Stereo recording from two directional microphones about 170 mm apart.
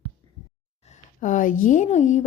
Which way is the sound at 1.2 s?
50° left (ahead or behind).